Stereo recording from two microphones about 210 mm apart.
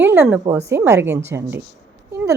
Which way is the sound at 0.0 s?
10° right (ahead or behind).